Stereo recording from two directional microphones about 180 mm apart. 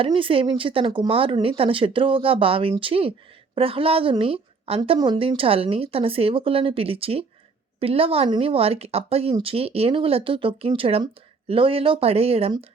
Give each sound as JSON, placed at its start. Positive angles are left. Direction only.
{"t": 0.0, "sound": "a woman's voice", "side_deg": -30}